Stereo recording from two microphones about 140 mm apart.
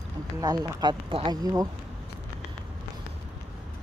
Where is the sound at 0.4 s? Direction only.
30° right (ahead or behind).